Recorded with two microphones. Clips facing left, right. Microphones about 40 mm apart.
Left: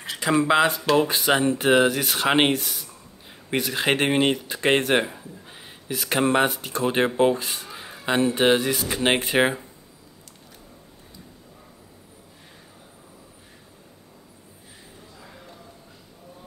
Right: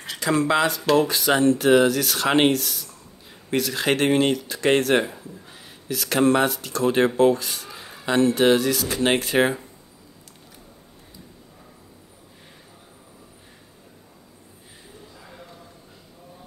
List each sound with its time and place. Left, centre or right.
0.2 s speech: centre
7.6 s speech: centre